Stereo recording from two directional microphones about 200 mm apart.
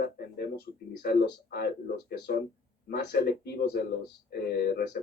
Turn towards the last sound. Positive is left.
turn(degrees=55)  # may be behind; listen again after turning